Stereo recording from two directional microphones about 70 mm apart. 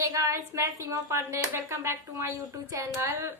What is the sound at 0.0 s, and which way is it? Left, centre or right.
A woman's voice, right.